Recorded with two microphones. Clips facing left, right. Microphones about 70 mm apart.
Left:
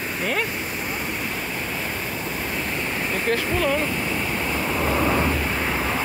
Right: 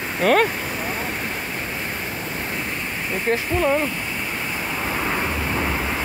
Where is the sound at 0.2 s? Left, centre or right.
Right.